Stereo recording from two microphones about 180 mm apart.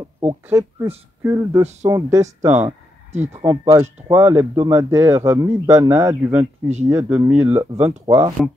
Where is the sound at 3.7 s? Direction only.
15° right (ahead or behind).